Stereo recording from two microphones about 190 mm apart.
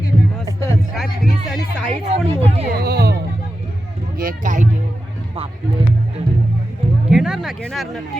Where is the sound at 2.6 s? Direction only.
55° right (ahead or behind).